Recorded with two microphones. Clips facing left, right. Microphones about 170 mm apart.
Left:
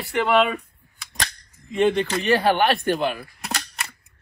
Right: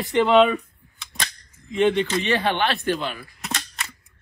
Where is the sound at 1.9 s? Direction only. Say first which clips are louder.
Left 1 dB; 35° left (ahead or behind).